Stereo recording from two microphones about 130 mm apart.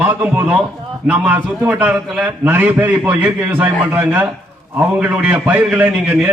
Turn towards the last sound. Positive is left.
turn(degrees=-10)  # may be behind; listen again after turning